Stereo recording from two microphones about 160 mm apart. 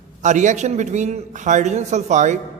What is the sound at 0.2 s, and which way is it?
A man's voice, 50° right (ahead or behind).